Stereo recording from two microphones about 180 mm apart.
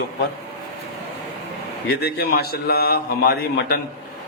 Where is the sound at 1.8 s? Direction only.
60° left (ahead or behind).